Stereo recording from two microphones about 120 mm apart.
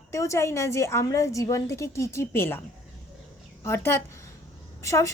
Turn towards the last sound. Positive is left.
turn(degrees=25)  # may be behind; listen again after turning